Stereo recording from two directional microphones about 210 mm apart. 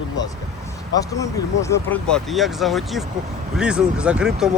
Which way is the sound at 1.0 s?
15° left (ahead or behind).